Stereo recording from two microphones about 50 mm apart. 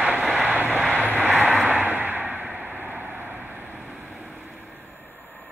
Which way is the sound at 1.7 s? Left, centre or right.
Right.